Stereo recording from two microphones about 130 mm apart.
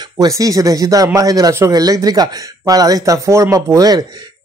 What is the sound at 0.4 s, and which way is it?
A man's voice, 25° right (ahead or behind).